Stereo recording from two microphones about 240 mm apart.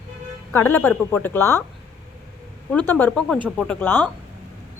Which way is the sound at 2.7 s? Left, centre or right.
Centre.